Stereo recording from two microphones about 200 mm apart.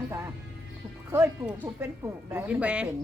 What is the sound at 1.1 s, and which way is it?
Speech, 10° right (ahead or behind).